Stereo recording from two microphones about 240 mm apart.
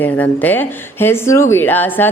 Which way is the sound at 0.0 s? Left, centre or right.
Centre.